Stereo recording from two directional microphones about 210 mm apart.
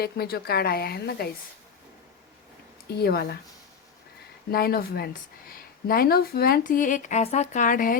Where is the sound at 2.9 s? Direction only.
50° left (ahead or behind).